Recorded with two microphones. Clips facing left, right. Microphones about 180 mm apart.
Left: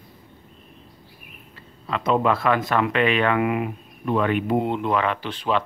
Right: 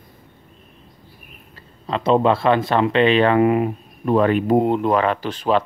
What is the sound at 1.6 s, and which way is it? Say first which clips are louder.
Speech: right 4 dB; 30° right (ahead or behind).